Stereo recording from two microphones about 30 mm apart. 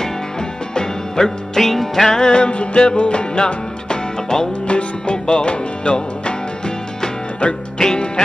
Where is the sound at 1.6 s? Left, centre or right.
Centre.